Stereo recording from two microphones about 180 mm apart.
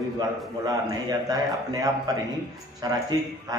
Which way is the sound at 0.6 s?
20° right (ahead or behind).